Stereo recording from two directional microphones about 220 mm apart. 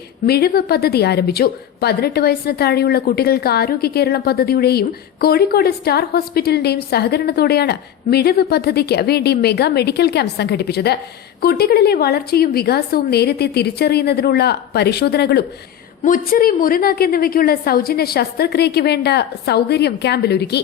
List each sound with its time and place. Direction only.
0.3 s a woman's voice: 45° left (ahead or behind)